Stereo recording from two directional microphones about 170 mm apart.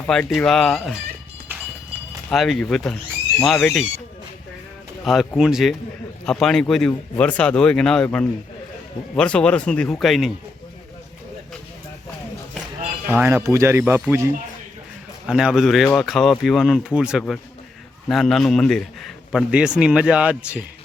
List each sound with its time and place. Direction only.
0.1 s a man's voice: 5° left (ahead or behind)
2.3 s a man's voice: centre (ahead or behind)
5.1 s a man's voice: centre (ahead or behind)
13.1 s speech: 15° right (ahead or behind)
15.3 s a man's voice: 5° right (ahead or behind)